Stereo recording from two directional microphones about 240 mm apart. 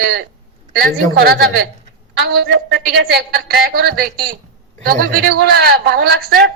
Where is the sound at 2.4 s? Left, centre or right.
Right.